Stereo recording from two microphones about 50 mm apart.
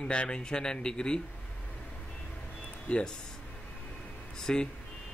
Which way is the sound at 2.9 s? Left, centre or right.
Left.